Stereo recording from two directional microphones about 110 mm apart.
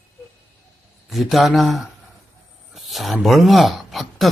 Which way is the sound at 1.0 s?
Centre (ahead or behind).